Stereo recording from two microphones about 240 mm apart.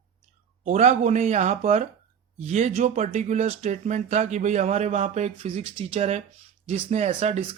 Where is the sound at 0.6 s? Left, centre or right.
Right.